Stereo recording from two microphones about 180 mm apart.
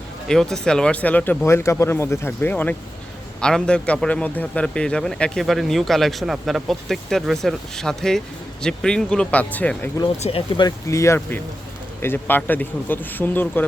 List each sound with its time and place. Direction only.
0.3 s a man's voice: 5° left (ahead or behind)
10.2 s speech: 30° left (ahead or behind)
10.7 s speech: 15° left (ahead or behind)